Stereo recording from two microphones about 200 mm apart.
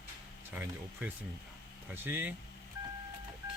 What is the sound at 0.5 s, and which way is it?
Speech, 10° right (ahead or behind).